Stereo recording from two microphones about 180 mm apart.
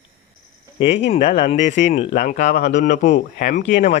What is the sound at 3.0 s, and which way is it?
Speech, 70° left (ahead or behind).